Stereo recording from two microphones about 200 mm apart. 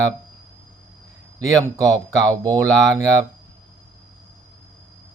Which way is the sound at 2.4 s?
20° right (ahead or behind).